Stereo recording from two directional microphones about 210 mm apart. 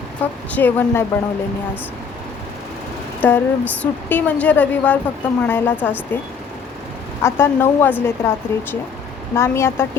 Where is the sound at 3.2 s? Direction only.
10° left (ahead or behind).